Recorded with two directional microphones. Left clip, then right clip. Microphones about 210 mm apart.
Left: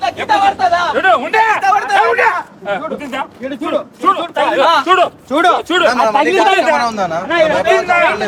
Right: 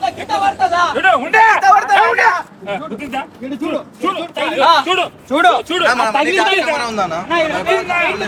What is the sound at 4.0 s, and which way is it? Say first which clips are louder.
A man's voice: left 6 dB; 10° left (ahead or behind).